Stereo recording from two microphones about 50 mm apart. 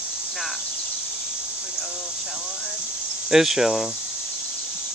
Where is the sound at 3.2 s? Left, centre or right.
Centre.